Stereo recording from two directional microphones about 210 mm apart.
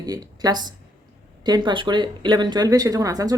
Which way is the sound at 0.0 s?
20° right (ahead or behind).